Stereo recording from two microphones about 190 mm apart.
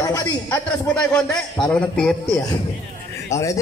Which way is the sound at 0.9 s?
5° left (ahead or behind).